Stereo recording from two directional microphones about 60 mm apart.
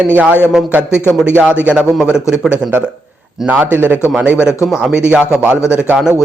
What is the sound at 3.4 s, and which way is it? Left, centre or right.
Speech, right.